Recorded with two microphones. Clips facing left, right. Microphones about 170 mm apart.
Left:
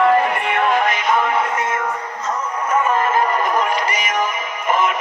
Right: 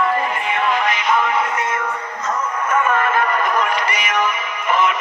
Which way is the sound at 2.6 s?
35° left (ahead or behind).